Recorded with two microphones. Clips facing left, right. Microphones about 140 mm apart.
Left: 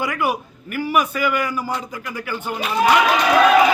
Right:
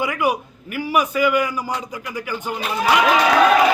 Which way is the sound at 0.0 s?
15° right (ahead or behind).